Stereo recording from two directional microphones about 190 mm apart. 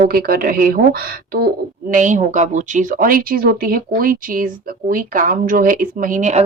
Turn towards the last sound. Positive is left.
turn(degrees=-40)  # may be behind; listen again after turning